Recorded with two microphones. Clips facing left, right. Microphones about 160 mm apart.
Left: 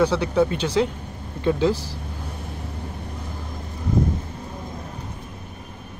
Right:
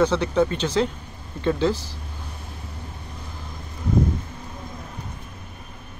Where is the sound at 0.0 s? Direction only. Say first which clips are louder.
Even; 10° left (ahead or behind).